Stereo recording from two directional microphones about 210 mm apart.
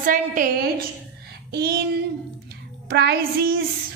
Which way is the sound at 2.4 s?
50° right (ahead or behind).